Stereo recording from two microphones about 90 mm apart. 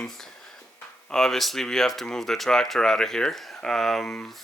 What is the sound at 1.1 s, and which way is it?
Speech, 5° left (ahead or behind).